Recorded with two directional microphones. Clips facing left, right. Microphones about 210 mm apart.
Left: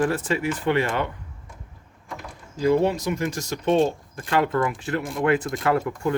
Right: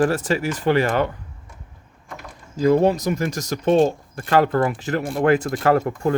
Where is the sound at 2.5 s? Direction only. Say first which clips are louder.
Right 4 dB; 40° right (ahead or behind).